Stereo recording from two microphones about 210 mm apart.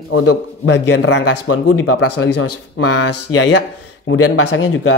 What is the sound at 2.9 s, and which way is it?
Speech, 90° left.